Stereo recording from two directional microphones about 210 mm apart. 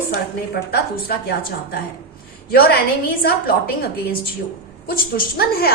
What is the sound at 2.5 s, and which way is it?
Speech, 50° left (ahead or behind).